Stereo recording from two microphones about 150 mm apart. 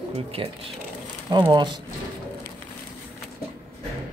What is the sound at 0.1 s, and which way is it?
Speech, 40° right (ahead or behind).